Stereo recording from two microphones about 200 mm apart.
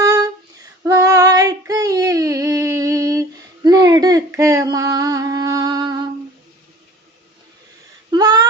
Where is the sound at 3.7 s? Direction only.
20° right (ahead or behind).